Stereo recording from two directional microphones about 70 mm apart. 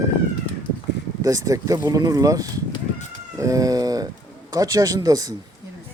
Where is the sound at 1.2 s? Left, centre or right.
Right.